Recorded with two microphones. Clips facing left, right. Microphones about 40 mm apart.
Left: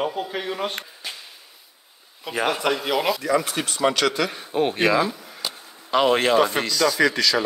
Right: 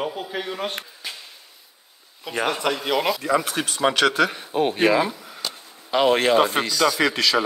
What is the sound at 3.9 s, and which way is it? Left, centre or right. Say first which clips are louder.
Speech: right 3 dB; centre.